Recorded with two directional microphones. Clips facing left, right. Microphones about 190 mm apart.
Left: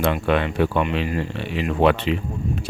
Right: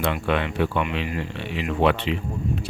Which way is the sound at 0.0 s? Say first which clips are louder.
Left 3 dB; 45° left (ahead or behind).